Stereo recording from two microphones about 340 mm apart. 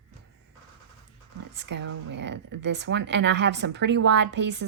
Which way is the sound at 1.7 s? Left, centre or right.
Right.